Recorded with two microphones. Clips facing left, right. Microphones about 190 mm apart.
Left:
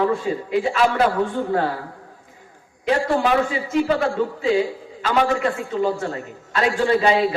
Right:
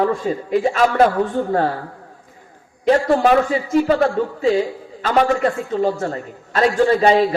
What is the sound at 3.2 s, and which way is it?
Speech, 45° right (ahead or behind).